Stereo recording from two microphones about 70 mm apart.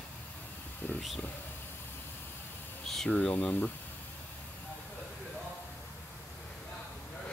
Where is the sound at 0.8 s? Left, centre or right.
Left.